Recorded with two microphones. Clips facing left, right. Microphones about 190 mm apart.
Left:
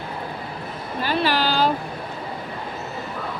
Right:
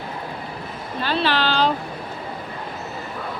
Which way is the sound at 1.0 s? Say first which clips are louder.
Even; 10° left (ahead or behind).